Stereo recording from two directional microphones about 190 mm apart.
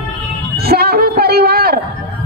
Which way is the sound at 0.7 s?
55° right (ahead or behind).